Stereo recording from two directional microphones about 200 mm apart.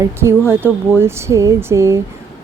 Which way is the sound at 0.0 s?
15° right (ahead or behind).